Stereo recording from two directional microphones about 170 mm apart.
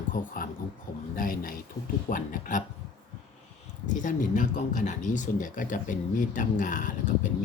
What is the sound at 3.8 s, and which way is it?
Speech, 50° left (ahead or behind).